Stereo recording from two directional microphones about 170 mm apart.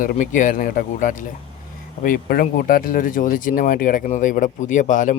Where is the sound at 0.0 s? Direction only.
50° left (ahead or behind).